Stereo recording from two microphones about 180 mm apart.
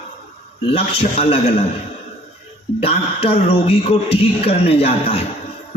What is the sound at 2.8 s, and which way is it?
A man's voice, 35° left (ahead or behind).